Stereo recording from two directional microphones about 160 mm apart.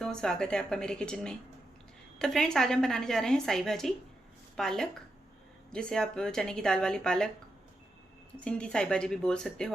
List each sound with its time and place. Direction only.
0.0 s a woman's voice: 5° left (ahead or behind)
8.4 s a woman's voice: 5° left (ahead or behind)